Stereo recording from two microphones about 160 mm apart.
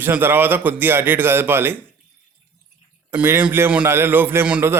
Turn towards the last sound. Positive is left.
turn(degrees=-10)  # may be behind; listen again after turning